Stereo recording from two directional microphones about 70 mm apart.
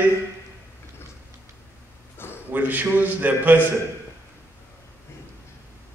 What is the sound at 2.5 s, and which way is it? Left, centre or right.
A man's voice, right.